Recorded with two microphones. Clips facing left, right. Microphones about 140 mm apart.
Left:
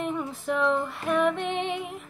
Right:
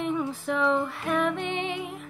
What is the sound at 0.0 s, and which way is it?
Music, centre (ahead or behind).